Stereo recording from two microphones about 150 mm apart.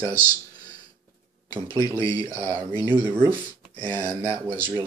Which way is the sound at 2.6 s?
15° right (ahead or behind).